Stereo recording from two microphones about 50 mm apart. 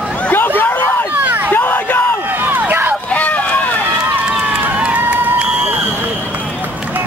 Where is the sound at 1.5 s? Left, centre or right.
Left.